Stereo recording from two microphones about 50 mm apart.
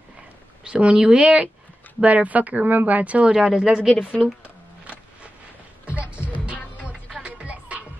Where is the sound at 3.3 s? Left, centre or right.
Centre.